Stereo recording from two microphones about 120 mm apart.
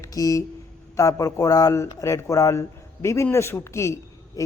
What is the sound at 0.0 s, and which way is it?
Speech, 30° left (ahead or behind).